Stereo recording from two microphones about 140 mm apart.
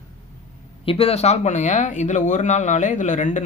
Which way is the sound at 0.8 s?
45° left (ahead or behind).